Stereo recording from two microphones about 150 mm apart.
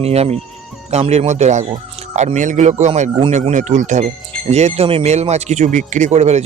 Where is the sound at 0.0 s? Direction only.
45° right (ahead or behind).